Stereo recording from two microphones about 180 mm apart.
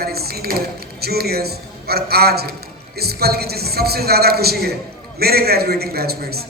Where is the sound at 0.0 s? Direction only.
60° right (ahead or behind).